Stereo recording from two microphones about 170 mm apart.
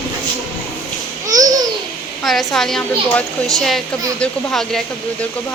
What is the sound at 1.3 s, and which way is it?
Babbling, 20° right (ahead or behind).